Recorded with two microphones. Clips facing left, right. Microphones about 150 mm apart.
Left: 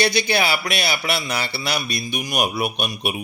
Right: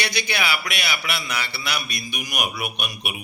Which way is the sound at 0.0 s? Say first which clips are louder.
Left 7 dB; 30° left (ahead or behind).